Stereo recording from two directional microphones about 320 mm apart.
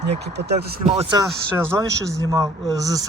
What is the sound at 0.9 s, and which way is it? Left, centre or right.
Speech, centre.